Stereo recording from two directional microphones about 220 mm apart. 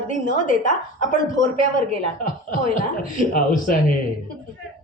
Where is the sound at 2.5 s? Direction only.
35° left (ahead or behind).